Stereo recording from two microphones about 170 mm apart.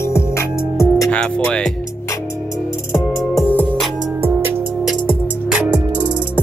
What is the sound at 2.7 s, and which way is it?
Music, 15° left (ahead or behind).